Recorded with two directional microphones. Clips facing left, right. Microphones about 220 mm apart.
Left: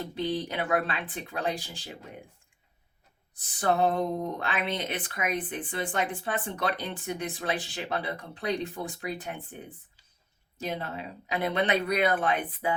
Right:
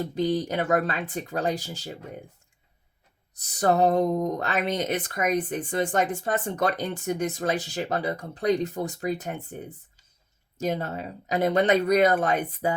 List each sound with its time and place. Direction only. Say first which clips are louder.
0.0 s speech: right 5 dB; 40° right (ahead or behind)
3.3 s speech: right 4 dB; 40° right (ahead or behind)